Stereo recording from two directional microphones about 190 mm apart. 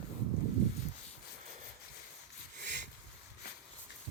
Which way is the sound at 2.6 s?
65° right (ahead or behind).